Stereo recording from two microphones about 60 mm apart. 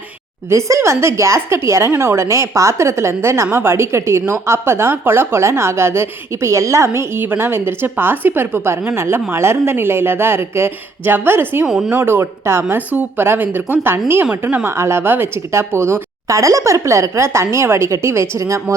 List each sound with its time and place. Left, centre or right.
0.5 s speech: right
11.6 s speech: centre
11.9 s speech: right
12.6 s speech: right
16.2 s speech: right